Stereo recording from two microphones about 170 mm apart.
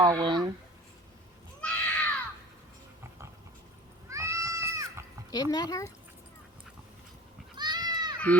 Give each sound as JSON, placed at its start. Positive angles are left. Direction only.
{"t": 0.0, "sound": "speech", "side_deg": -25}
{"t": 1.6, "sound": "a sound", "side_deg": 10}
{"t": 4.1, "sound": "music", "side_deg": -20}
{"t": 5.3, "sound": "speech", "side_deg": 25}
{"t": 7.5, "sound": "goat", "side_deg": -25}